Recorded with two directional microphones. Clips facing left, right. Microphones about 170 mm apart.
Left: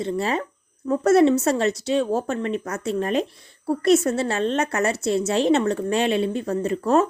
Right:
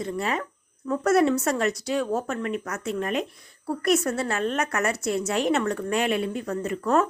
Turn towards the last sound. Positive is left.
turn(degrees=25)  # may be behind; listen again after turning